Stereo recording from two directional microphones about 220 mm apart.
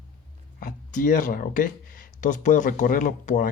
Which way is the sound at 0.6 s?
35° left (ahead or behind).